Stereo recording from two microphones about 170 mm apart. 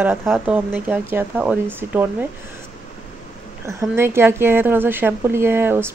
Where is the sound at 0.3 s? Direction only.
10° right (ahead or behind).